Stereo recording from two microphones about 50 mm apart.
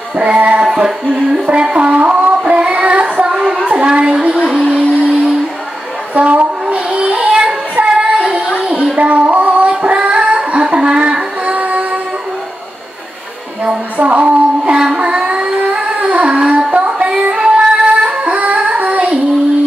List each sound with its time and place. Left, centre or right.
0.1 s music: right
1.5 s child singing: centre
3.6 s a sound: centre
4.6 s music: centre
6.1 s a sound: right
6.7 s child singing: right
8.9 s female singing: right
13.9 s a sound: right
16.1 s music: right